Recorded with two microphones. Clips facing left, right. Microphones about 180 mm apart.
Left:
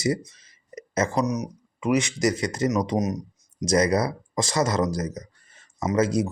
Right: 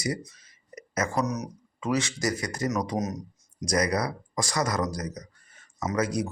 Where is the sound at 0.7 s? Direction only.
25° left (ahead or behind).